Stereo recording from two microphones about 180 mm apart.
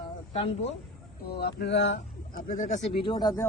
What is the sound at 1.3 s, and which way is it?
Speech, 60° left (ahead or behind).